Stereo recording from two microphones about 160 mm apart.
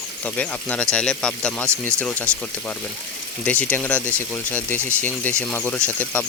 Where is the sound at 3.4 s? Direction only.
10° left (ahead or behind).